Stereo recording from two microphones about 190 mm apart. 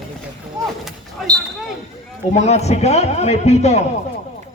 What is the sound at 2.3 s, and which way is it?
Speech, 35° left (ahead or behind).